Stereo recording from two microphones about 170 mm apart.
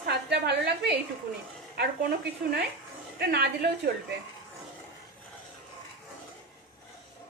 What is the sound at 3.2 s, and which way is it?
Speech, 65° right (ahead or behind).